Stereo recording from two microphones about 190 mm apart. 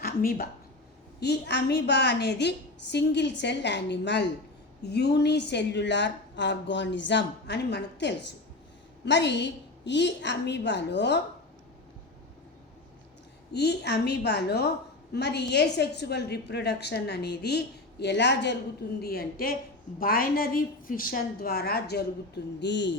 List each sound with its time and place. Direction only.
0.0 s speech: 50° left (ahead or behind)
1.2 s a woman's voice: 60° left (ahead or behind)
13.5 s a woman's voice: 60° left (ahead or behind)